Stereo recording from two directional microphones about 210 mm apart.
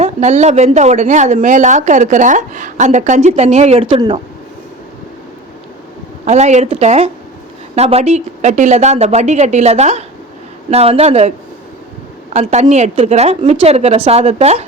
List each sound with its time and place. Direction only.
0.0 s speech: 35° right (ahead or behind)
6.2 s speech: 35° right (ahead or behind)